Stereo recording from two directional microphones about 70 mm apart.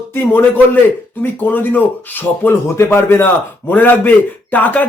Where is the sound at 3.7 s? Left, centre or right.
Left.